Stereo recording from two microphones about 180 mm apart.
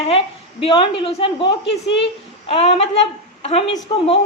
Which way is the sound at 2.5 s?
35° left (ahead or behind).